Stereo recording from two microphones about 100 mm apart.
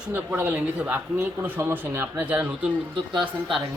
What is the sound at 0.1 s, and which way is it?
Speech, 20° right (ahead or behind).